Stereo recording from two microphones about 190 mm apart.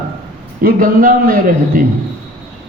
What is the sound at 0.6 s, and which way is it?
A man's voice, 50° right (ahead or behind).